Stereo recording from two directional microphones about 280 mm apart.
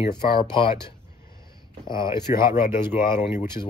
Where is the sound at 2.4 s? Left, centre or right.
Centre.